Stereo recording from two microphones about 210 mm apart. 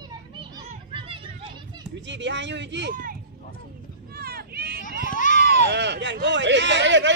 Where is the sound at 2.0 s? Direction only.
60° right (ahead or behind).